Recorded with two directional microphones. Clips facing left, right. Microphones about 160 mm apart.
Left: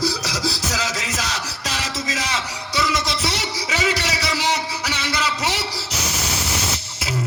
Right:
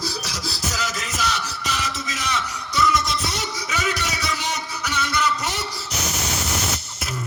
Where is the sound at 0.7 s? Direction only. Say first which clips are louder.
Left 3 dB; 90° left.